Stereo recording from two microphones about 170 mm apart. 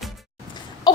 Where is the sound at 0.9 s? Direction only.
25° left (ahead or behind).